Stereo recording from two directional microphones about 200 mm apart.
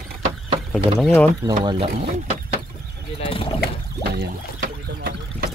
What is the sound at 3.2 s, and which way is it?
Wild animals, 30° left (ahead or behind).